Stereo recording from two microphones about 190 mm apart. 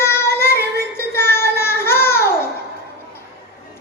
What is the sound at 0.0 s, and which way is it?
Child singing, 15° left (ahead or behind).